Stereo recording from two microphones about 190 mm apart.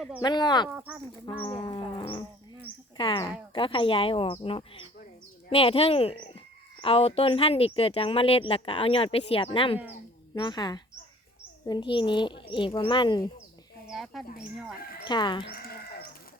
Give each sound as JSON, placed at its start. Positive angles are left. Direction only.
{"t": 0.2, "sound": "speech", "side_deg": 20}
{"t": 0.7, "sound": "speech", "side_deg": -10}
{"t": 1.5, "sound": "speech", "side_deg": 25}
{"t": 13.8, "sound": "speech", "side_deg": 0}
{"t": 15.0, "sound": "speech", "side_deg": 25}
{"t": 15.5, "sound": "livestock", "side_deg": 50}